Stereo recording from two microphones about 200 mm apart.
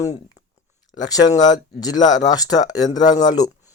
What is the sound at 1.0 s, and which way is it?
Speech, 20° left (ahead or behind).